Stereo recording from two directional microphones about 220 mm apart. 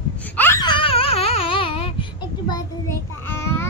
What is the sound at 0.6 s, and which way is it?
Baby cry, 25° left (ahead or behind).